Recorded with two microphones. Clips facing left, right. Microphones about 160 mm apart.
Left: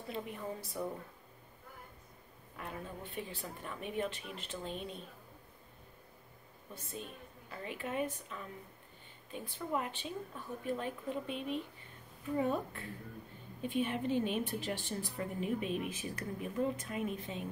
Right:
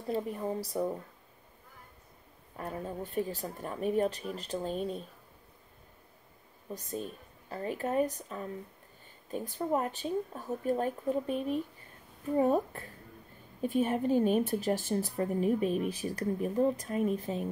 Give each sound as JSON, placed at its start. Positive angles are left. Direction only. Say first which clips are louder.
{"t": 0.1, "sound": "speech", "louder": "right 8 dB", "side_deg": -35}
{"t": 2.5, "sound": "speech", "louder": "right 7 dB", "side_deg": -40}
{"t": 6.7, "sound": "speech", "louder": "right 8 dB", "side_deg": -40}